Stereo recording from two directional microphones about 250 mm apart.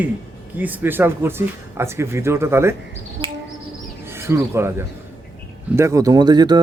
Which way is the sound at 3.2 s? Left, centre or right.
Right.